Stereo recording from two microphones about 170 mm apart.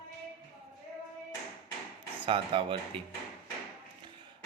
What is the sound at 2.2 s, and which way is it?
Speech, 30° right (ahead or behind).